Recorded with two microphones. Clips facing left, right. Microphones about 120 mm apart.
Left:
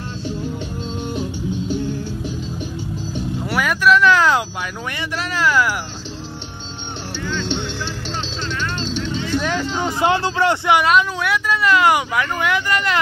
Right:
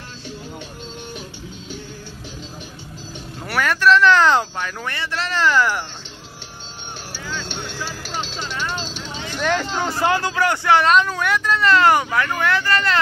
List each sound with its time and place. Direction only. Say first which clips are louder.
3.4 s a sound: even; 10° left (ahead or behind)
8.5 s vehicle: left 4 dB; 5° right (ahead or behind)
9.4 s speech: even; 10° left (ahead or behind)
10.8 s speech: even; 5° left (ahead or behind)